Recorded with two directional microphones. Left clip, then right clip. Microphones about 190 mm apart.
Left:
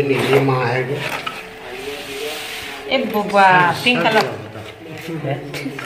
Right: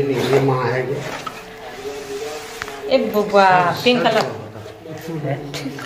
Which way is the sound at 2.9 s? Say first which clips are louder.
Right 2 dB; 70° right (ahead or behind).